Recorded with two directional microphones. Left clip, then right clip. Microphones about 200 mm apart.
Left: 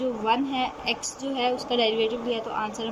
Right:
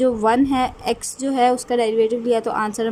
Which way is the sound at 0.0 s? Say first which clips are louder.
Right 8 dB; 40° right (ahead or behind).